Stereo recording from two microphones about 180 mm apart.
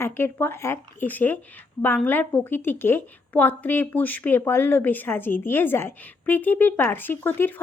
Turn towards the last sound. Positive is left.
turn(degrees=10)  # may be behind; listen again after turning